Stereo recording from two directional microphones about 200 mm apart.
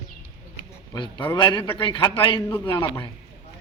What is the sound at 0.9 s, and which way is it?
A man's voice, 20° left (ahead or behind).